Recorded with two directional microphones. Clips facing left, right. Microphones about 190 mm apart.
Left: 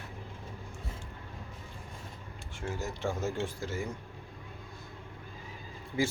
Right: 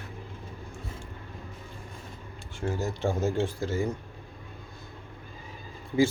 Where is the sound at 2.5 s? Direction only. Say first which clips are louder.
Right 6 dB; 30° right (ahead or behind).